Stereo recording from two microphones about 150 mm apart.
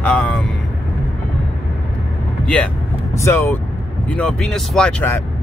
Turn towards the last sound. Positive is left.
turn(degrees=10)  # may be behind; listen again after turning